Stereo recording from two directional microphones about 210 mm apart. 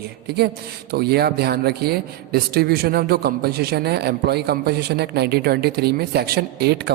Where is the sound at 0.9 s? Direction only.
50° right (ahead or behind).